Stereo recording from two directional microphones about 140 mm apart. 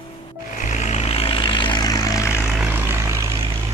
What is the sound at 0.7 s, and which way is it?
Vehicle, 55° left (ahead or behind).